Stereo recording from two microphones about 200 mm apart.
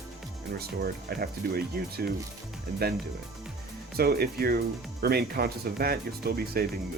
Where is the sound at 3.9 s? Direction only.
50° right (ahead or behind).